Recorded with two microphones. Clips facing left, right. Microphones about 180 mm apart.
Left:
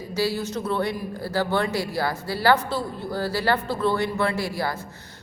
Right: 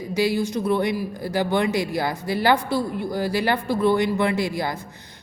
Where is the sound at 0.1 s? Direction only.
15° right (ahead or behind).